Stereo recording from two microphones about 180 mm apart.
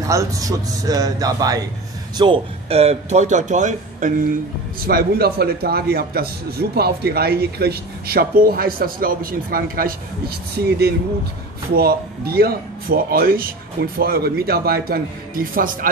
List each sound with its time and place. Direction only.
0.0 s a man's voice: 15° right (ahead or behind); by 4.3 s 45° right (ahead or behind)
4.7 s speech: 55° right (ahead or behind)